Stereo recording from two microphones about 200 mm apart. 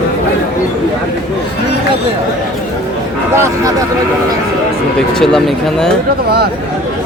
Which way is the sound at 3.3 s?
15° right (ahead or behind).